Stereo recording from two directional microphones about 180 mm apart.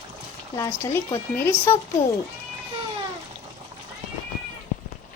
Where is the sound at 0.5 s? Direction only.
15° left (ahead or behind).